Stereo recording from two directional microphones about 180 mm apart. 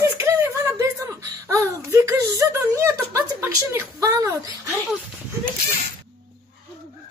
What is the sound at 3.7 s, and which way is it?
Speech, 20° right (ahead or behind).